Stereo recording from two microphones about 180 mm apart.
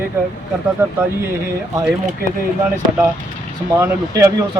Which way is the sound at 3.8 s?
15° right (ahead or behind).